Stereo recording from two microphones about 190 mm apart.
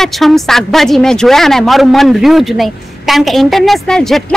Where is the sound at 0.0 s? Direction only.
Centre (ahead or behind).